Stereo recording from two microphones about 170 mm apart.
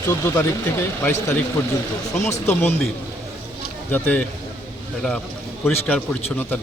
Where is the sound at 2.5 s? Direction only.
15° left (ahead or behind).